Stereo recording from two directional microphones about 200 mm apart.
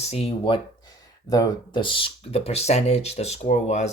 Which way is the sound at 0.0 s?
30° left (ahead or behind).